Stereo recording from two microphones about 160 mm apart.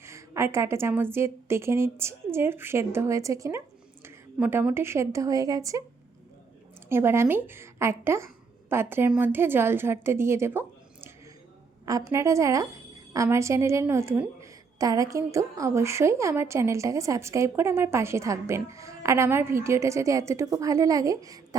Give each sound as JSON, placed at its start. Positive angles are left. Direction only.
{"t": 0.0, "sound": "a woman's voice", "side_deg": -20}
{"t": 6.8, "sound": "a woman's voice", "side_deg": -15}